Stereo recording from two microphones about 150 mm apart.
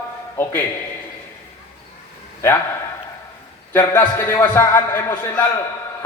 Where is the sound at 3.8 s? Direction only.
15° left (ahead or behind).